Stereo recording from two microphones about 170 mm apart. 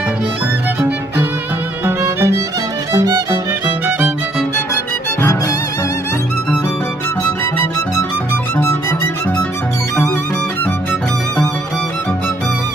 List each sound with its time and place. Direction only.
1.8 s music: 15° right (ahead or behind)
5.2 s music: 15° left (ahead or behind)
8.5 s music: 15° left (ahead or behind)